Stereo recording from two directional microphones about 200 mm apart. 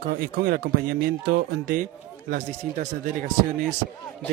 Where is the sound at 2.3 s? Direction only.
40° right (ahead or behind).